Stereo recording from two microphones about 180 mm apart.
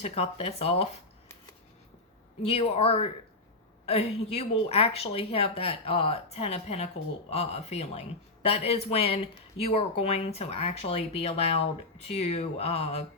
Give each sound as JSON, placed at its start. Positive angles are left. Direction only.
{"t": 0.0, "sound": "speech", "side_deg": 35}
{"t": 2.5, "sound": "speech", "side_deg": 30}